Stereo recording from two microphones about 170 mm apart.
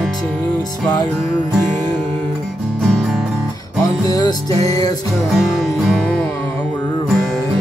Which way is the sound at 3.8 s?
20° left (ahead or behind).